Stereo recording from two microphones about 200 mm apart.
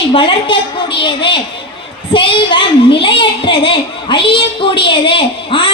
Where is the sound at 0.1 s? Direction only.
25° left (ahead or behind).